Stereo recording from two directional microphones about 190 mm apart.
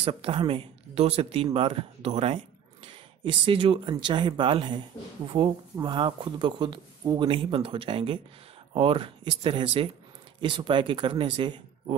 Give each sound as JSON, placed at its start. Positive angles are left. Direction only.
{"t": 0.0, "sound": "speech", "side_deg": -30}